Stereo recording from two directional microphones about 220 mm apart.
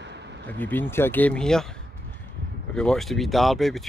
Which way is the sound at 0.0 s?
50° right (ahead or behind).